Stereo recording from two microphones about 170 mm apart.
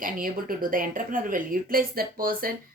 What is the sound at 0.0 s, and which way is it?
A woman's voice, 55° right (ahead or behind).